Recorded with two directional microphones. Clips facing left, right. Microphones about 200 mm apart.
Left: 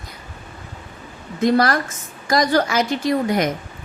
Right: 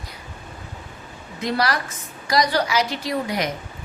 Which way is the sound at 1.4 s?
50° left (ahead or behind).